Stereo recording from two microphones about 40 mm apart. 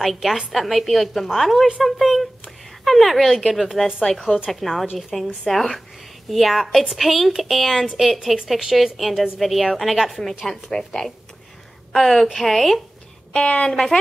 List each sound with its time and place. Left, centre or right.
0.0 s a woman's voice: centre
4.1 s a woman's voice: centre
10.2 s a woman's voice: centre
11.9 s a woman's voice: centre
13.3 s a woman's voice: left